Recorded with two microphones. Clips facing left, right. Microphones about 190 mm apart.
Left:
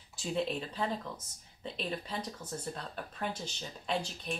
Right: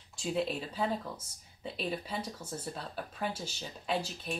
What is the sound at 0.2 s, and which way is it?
Speech, centre (ahead or behind).